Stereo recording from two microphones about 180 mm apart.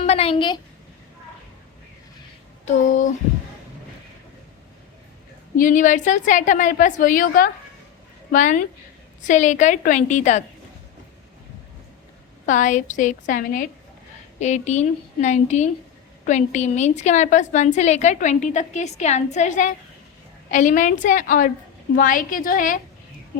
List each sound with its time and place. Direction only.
0.0 s a woman's voice: 35° left (ahead or behind)
2.6 s a woman's voice: 45° left (ahead or behind)
5.5 s a woman's voice: 45° left (ahead or behind)
12.5 s a woman's voice: 45° left (ahead or behind)